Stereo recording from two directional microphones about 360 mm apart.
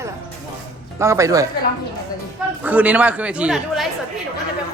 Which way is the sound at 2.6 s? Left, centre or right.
Centre.